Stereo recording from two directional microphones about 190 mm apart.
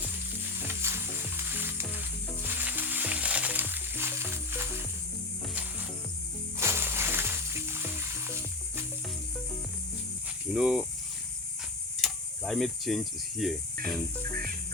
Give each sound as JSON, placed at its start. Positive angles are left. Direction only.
{"t": 0.6, "sound": "sizzle", "side_deg": -10}
{"t": 6.6, "sound": "music", "side_deg": -15}
{"t": 10.5, "sound": "speech", "side_deg": -5}
{"t": 11.9, "sound": "a sound", "side_deg": 0}
{"t": 13.8, "sound": "cricket", "side_deg": -50}